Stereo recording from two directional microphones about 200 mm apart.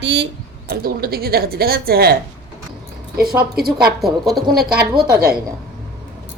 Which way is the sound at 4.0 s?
Centre (ahead or behind).